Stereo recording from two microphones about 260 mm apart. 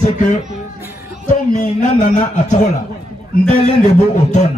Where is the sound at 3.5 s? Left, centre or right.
Left.